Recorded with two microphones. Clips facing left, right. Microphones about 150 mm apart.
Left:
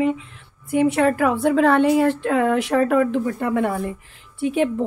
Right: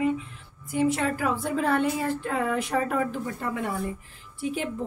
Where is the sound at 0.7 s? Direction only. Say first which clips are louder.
Left 7 dB; 65° left (ahead or behind).